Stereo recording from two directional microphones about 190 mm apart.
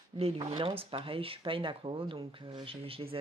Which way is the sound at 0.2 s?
25° right (ahead or behind).